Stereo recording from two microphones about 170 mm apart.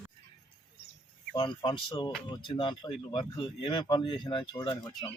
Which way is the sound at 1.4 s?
30° left (ahead or behind).